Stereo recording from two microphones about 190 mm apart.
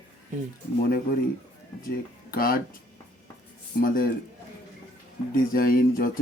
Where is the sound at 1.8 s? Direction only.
50° left (ahead or behind).